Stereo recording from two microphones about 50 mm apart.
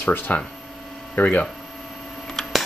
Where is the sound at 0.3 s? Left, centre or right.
Left.